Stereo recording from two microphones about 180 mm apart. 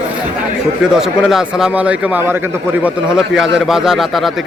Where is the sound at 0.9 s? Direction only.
5° right (ahead or behind).